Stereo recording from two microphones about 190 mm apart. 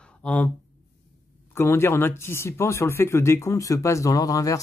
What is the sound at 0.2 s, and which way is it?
Speech, 10° left (ahead or behind).